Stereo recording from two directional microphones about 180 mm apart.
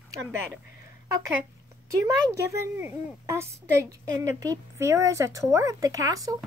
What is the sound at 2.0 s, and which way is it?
A child's voice, 15° right (ahead or behind).